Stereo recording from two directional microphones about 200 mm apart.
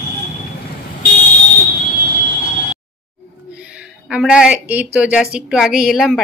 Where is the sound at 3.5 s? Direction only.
5° right (ahead or behind).